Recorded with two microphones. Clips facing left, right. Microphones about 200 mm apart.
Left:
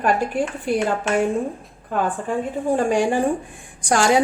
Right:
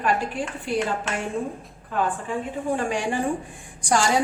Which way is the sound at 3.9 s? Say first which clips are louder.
Left 4 dB; 65° left (ahead or behind).